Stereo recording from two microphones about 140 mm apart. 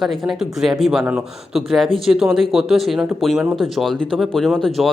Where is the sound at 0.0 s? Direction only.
Centre (ahead or behind).